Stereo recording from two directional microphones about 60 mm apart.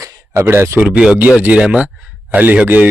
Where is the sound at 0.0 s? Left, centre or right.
Right.